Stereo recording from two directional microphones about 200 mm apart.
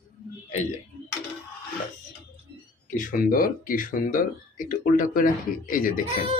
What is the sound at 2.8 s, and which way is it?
Speech, 40° left (ahead or behind).